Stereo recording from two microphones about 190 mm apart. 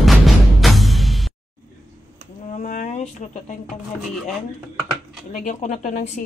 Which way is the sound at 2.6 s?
40° left (ahead or behind).